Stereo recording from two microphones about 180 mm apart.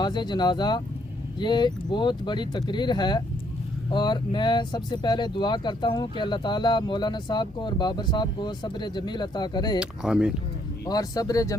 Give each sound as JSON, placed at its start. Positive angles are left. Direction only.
{"t": 0.0, "sound": "speech", "side_deg": 25}
{"t": 9.8, "sound": "speech", "side_deg": -5}
{"t": 10.8, "sound": "speech", "side_deg": 20}